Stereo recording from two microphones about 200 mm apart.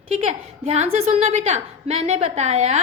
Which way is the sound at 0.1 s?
30° right (ahead or behind).